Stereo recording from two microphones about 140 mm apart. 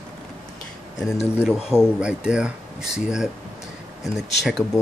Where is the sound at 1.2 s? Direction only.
Centre (ahead or behind).